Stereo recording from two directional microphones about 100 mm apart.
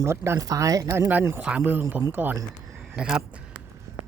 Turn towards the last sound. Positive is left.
turn(degrees=-10)  # may be behind; listen again after turning